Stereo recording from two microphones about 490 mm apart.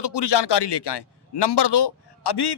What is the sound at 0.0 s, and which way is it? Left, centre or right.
A man's voice, left.